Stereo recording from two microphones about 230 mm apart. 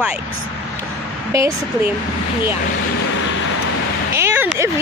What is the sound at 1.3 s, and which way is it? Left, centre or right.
Speech, centre.